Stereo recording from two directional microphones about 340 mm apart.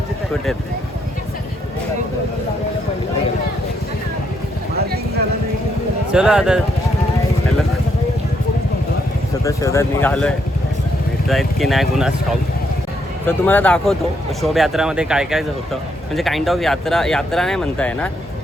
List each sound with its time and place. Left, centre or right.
6.1 s speech: centre
9.4 s speech: centre
13.2 s speech: centre